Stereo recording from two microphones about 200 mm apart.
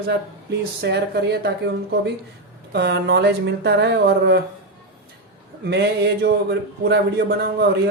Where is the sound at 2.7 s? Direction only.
55° right (ahead or behind).